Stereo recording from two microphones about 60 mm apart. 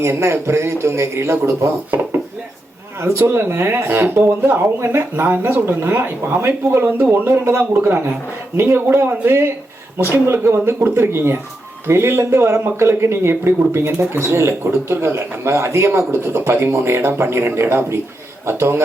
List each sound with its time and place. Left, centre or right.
0.0 s speech: right
3.0 s speech: right